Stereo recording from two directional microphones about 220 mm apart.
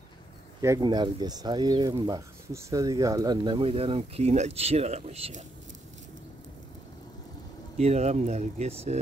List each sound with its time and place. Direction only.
0.6 s speech: 15° right (ahead or behind)
7.7 s speech: 30° right (ahead or behind)